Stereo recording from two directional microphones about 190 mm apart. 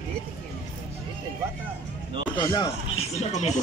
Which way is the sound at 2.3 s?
20° left (ahead or behind).